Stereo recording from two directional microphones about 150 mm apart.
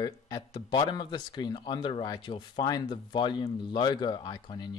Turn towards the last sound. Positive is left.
turn(degrees=30)  # may be behind; listen again after turning